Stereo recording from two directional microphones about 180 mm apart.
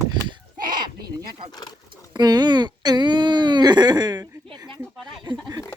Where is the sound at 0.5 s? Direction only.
50° right (ahead or behind).